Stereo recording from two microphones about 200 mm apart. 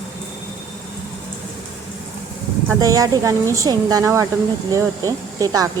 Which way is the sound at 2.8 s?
20° right (ahead or behind).